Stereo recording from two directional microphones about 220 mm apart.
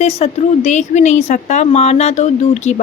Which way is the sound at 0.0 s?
30° left (ahead or behind).